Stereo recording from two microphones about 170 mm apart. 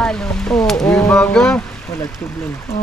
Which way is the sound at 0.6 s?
5° left (ahead or behind).